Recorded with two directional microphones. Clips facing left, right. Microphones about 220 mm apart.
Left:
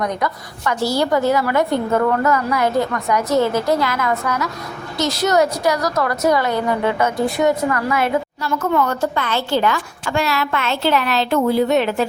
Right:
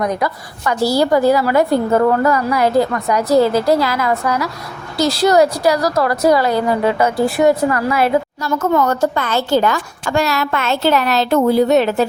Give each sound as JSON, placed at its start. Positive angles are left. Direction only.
{"t": 0.0, "sound": "a woman's voice", "side_deg": -30}